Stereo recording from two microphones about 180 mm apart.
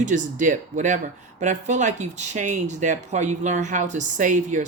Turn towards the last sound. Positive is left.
turn(degrees=-45)  # may be behind; listen again after turning